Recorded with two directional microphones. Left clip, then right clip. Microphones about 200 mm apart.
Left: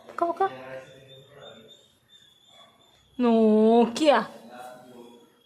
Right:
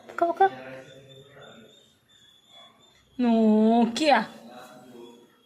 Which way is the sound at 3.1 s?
20° left (ahead or behind).